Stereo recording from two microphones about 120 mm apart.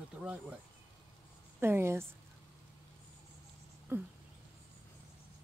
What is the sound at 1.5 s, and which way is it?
Speech, 20° right (ahead or behind).